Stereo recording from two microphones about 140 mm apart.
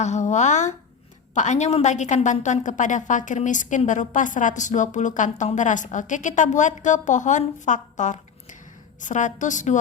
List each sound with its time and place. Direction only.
0.0 s a woman's voice: 55° left (ahead or behind)